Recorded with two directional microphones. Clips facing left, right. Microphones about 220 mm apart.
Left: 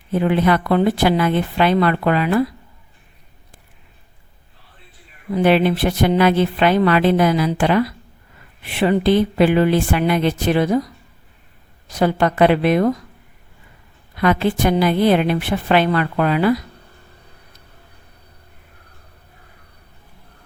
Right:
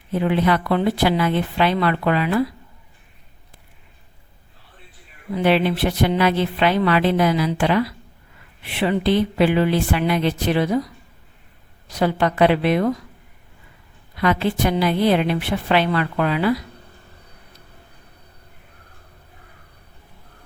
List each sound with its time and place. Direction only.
0.1 s speech: 50° left (ahead or behind)
5.3 s speech: 45° left (ahead or behind)
11.9 s speech: 45° left (ahead or behind)
14.2 s speech: 50° left (ahead or behind)